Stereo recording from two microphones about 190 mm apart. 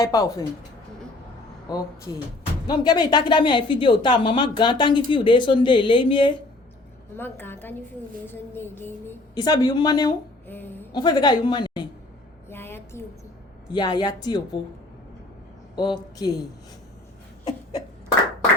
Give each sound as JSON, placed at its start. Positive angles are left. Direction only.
{"t": 0.0, "sound": "a woman's voice", "side_deg": 15}
{"t": 1.7, "sound": "a woman's voice", "side_deg": 20}
{"t": 7.2, "sound": "a woman's voice", "side_deg": 10}
{"t": 10.4, "sound": "a woman's voice", "side_deg": 10}
{"t": 10.9, "sound": "a woman's voice", "side_deg": 20}
{"t": 12.5, "sound": "a sound", "side_deg": 10}
{"t": 13.7, "sound": "a woman's voice", "side_deg": 20}
{"t": 15.7, "sound": "a woman's voice", "side_deg": 25}